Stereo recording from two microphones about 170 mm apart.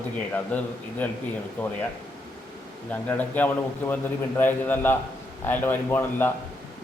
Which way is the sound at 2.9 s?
10° left (ahead or behind).